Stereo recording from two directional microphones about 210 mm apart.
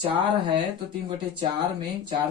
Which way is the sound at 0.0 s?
25° right (ahead or behind).